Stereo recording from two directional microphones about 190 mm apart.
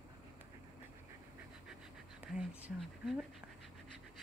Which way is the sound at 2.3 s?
5° right (ahead or behind).